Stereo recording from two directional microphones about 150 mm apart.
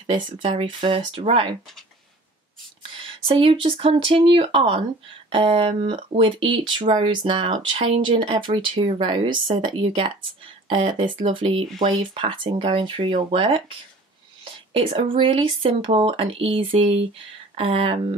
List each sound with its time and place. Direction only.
0.0 s speech: 35° right (ahead or behind)
3.0 s speech: 35° right (ahead or behind)